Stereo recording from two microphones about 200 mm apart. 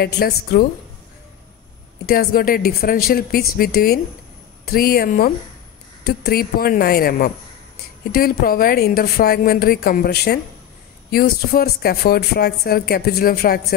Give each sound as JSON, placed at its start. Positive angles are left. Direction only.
{"t": 0.0, "sound": "speech", "side_deg": 50}
{"t": 2.0, "sound": "speech", "side_deg": 50}